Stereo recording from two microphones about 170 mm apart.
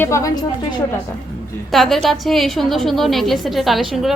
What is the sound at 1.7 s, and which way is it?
A woman's voice, centre (ahead or behind).